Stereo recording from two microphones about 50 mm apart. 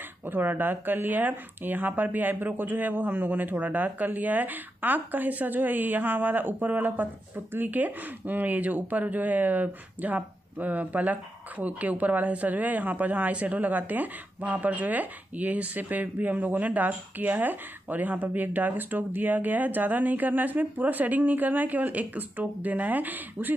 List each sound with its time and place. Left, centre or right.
0.3 s speech: right